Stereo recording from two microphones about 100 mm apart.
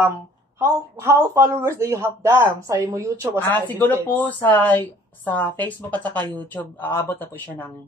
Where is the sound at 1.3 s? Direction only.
30° right (ahead or behind).